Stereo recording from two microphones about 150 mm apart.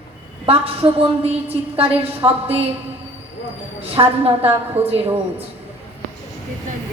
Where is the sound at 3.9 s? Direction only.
40° right (ahead or behind).